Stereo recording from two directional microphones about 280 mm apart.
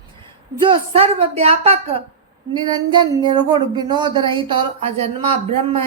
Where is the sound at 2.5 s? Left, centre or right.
Centre.